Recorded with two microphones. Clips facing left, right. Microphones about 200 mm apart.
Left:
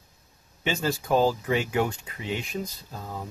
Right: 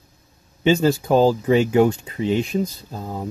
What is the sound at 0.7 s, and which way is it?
Speech, 25° right (ahead or behind).